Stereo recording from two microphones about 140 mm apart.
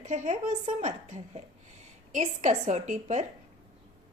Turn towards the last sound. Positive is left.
turn(degrees=-60)  # may be behind; listen again after turning